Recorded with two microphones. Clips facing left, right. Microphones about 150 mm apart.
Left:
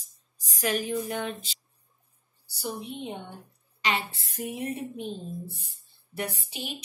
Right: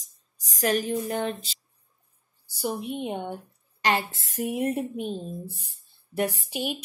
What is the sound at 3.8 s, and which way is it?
Speech, 45° right (ahead or behind).